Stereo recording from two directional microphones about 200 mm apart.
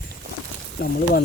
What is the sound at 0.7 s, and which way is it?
Speech, 50° left (ahead or behind).